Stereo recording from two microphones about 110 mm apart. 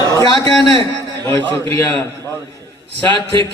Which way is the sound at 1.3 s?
30° left (ahead or behind).